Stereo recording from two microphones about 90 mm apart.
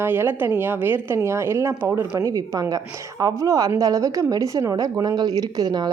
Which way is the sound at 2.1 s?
40° right (ahead or behind).